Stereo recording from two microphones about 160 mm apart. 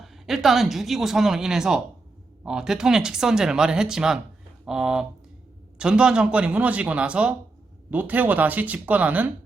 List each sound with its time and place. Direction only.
0.0 s speech: centre (ahead or behind)